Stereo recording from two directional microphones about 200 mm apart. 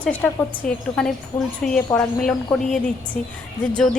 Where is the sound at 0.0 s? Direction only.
5° left (ahead or behind).